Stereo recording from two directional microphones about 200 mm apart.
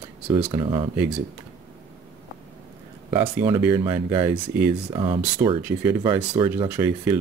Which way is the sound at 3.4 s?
20° right (ahead or behind).